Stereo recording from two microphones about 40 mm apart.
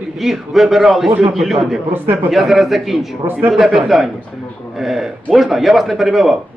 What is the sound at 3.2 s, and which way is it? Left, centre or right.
Speech, right.